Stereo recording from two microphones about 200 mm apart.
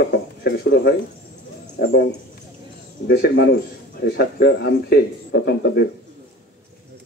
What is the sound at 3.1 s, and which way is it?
Speech, 55° left (ahead or behind).